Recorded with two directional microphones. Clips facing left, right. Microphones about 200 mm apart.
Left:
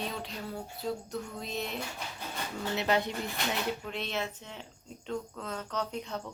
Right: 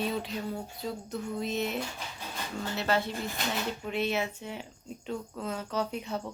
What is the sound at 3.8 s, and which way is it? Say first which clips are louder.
Speech: right 5 dB; 5° right (ahead or behind).